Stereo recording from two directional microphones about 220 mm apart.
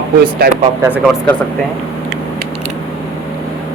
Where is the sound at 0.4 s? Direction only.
45° right (ahead or behind).